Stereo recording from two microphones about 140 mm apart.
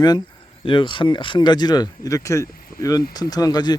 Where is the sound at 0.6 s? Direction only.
35° left (ahead or behind).